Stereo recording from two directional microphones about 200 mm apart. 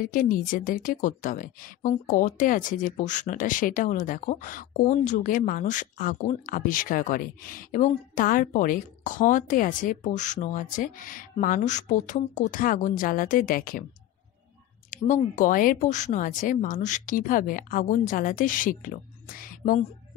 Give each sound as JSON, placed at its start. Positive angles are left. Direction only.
{"t": 0.0, "sound": "speech", "side_deg": 45}
{"t": 14.9, "sound": "speech", "side_deg": 40}